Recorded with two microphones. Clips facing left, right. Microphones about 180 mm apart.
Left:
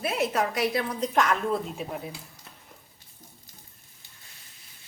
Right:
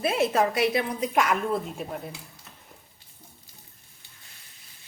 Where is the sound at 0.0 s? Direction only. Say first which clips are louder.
Right 3 dB; 25° right (ahead or behind).